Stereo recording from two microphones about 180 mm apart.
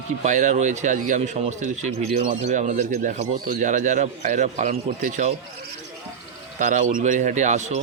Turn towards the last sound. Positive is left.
turn(degrees=-40)  # may be behind; listen again after turning